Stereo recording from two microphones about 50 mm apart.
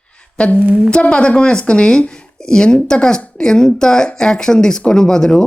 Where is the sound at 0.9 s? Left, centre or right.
Left.